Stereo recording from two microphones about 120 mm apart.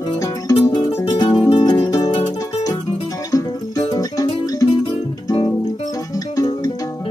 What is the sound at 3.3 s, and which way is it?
Music, 30° left (ahead or behind).